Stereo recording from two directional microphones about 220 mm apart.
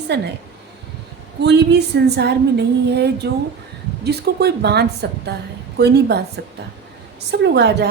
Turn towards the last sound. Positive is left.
turn(degrees=-50)  # may be behind; listen again after turning